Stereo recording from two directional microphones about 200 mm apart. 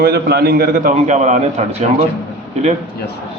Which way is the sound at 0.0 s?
50° right (ahead or behind).